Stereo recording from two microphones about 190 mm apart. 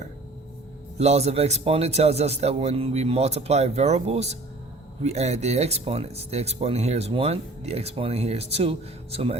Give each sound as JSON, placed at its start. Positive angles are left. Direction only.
{"t": 0.9, "sound": "speech", "side_deg": -35}